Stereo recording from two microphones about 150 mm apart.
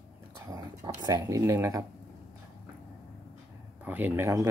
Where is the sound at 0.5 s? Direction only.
25° right (ahead or behind).